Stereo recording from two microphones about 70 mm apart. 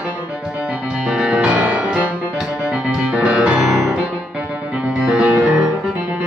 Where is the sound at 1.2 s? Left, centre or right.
Centre.